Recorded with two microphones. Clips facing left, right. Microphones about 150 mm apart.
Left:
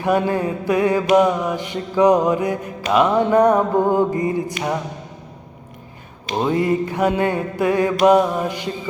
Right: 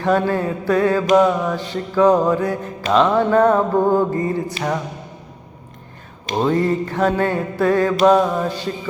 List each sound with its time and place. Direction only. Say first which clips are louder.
0.0 s mantra: right 1 dB; 15° left (ahead or behind)
6.3 s mantra: right 1 dB; 10° left (ahead or behind)